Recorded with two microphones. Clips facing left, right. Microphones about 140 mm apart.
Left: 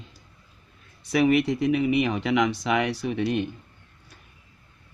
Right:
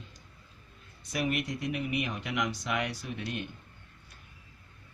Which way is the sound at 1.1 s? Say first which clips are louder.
Left 11 dB; 85° left.